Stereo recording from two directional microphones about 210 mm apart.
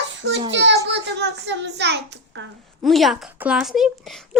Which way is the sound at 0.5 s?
55° right (ahead or behind).